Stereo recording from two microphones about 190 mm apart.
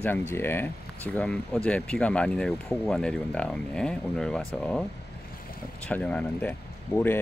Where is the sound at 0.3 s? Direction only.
10° left (ahead or behind).